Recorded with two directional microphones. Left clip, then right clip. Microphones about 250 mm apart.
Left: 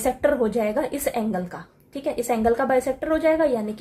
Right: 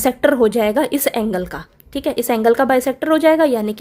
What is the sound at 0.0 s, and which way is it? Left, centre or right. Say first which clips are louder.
A woman's voice: right 7 dB; right.